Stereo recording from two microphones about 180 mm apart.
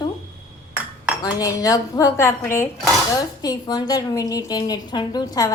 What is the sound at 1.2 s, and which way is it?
A woman's voice, 20° left (ahead or behind).